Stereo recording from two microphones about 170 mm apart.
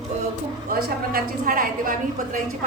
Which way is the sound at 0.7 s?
60° right (ahead or behind).